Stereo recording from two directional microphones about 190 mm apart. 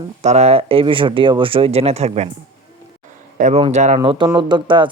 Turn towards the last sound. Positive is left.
turn(degrees=-25)  # may be behind; listen again after turning